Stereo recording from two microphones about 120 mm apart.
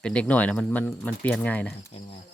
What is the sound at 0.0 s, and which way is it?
Speech, 10° left (ahead or behind).